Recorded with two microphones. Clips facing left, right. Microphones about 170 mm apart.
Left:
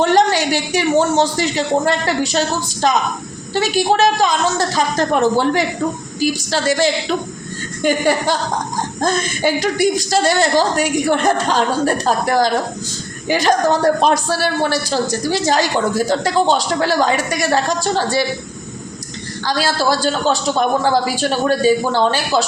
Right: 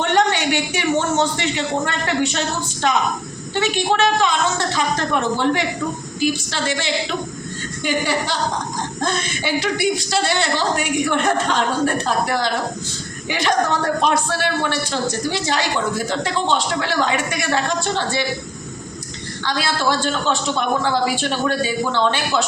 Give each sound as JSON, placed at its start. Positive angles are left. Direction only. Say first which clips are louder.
{"t": 0.0, "sound": "a man's voice", "louder": "left 4 dB", "side_deg": 35}
{"t": 19.5, "sound": "speech", "louder": "left 3 dB", "side_deg": 40}